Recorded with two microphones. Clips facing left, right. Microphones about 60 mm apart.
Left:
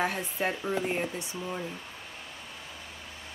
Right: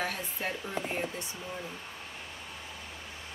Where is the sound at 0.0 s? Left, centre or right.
Left.